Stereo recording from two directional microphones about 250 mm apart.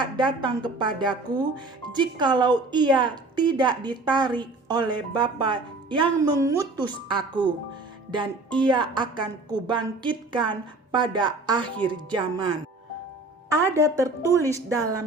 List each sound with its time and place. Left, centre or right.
0.0 s a woman's voice: centre